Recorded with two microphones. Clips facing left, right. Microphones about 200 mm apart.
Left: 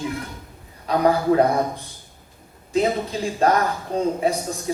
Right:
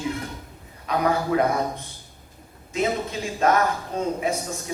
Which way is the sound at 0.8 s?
35° left (ahead or behind).